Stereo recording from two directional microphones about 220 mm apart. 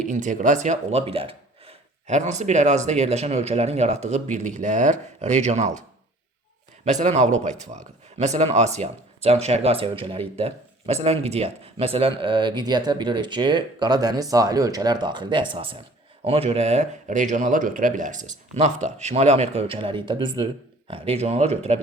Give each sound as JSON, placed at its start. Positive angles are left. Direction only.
{"t": 0.0, "sound": "speech", "side_deg": -35}
{"t": 6.8, "sound": "speech", "side_deg": -30}